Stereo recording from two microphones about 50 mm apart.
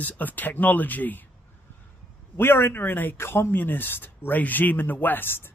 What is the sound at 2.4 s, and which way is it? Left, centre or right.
Speech, left.